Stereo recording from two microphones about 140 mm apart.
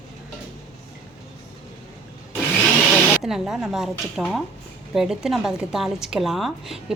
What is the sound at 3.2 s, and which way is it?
Speech, 5° right (ahead or behind).